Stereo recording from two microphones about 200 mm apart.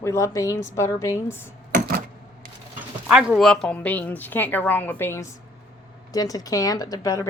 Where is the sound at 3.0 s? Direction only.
5° right (ahead or behind); by 7.2 s 15° left (ahead or behind).